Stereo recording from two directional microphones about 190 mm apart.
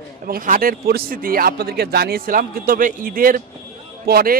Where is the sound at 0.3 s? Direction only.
50° right (ahead or behind).